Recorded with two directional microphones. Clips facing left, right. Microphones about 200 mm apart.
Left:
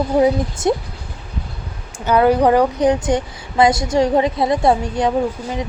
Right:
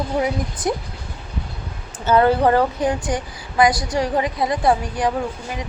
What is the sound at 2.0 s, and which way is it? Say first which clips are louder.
Speech: left 2 dB; 15° left (ahead or behind).